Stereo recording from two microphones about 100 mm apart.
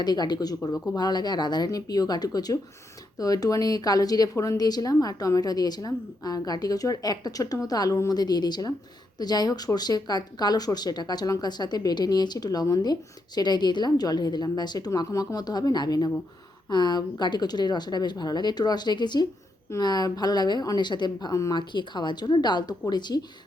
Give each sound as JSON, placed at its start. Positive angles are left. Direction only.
{"t": 0.0, "sound": "a woman's voice", "side_deg": 45}